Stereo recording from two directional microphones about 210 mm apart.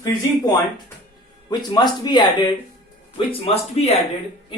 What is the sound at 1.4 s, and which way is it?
Speech, 20° left (ahead or behind).